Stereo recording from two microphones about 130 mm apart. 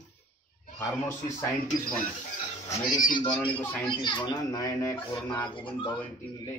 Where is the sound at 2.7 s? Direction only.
30° left (ahead or behind).